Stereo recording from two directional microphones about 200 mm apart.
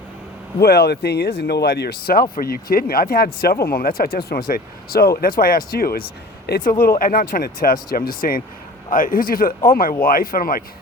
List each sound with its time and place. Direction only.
0.6 s speech: 55° left (ahead or behind)